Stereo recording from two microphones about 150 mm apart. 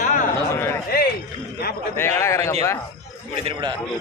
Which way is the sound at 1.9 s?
15° left (ahead or behind).